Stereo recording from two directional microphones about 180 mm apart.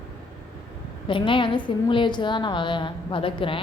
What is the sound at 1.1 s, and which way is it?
A woman's voice, 25° left (ahead or behind).